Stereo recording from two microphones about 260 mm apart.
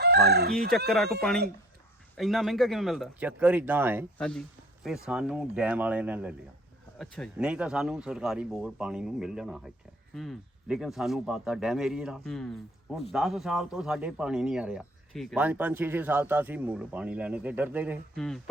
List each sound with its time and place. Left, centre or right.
0.0 s chicken: right
0.9 s speech: centre
4.2 s speech: centre